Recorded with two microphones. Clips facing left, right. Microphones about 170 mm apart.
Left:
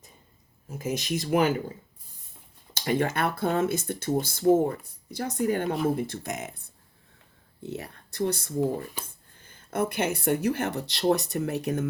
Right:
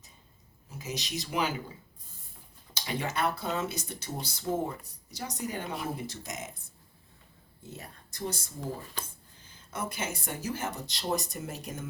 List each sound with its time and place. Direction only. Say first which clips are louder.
0.7 s speech: left 8 dB; 50° left (ahead or behind)
2.7 s speech: left 7 dB; 55° left (ahead or behind)
7.7 s speech: left 9 dB; 65° left (ahead or behind)